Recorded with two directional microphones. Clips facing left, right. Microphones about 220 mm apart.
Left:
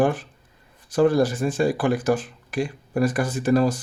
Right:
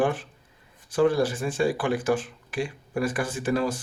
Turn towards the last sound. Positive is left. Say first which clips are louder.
# left 6 dB
turn(degrees=40)  # may be behind; listen again after turning